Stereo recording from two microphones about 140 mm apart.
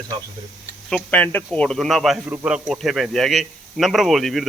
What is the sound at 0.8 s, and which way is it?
Speech, 10° left (ahead or behind).